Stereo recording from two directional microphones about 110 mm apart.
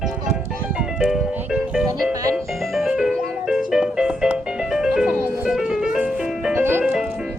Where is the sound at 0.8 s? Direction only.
5° right (ahead or behind).